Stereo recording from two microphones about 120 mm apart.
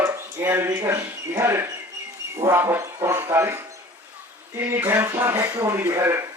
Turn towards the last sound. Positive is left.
turn(degrees=-20)  # may be behind; listen again after turning